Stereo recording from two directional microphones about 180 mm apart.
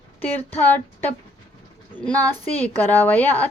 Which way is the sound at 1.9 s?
10° left (ahead or behind).